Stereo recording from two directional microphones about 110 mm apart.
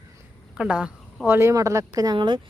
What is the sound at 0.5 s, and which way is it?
Speech, 10° right (ahead or behind).